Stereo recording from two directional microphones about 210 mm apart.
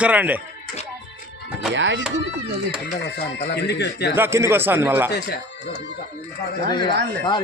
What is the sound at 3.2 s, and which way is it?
Speech, 50° left (ahead or behind).